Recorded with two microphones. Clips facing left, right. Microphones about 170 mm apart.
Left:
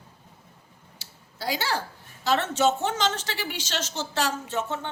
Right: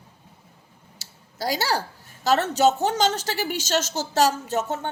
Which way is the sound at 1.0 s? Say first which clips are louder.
Right 4 dB; 40° right (ahead or behind).